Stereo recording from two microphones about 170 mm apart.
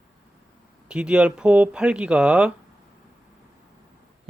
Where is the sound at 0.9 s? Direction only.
5° right (ahead or behind).